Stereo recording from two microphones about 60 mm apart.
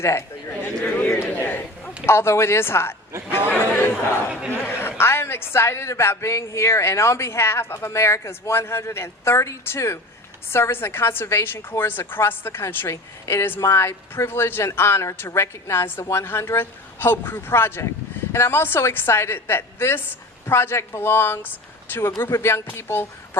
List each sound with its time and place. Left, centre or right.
0.0 s a man's voice: left
0.9 s a sound: left
1.2 s crowd: left
2.0 s a man's voice: left